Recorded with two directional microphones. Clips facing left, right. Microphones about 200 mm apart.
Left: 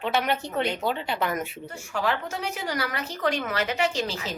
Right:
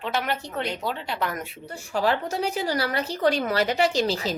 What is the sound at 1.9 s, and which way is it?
A woman's voice, 35° right (ahead or behind).